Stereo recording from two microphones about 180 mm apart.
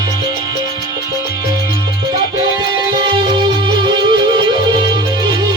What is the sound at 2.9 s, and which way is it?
Music, 25° right (ahead or behind).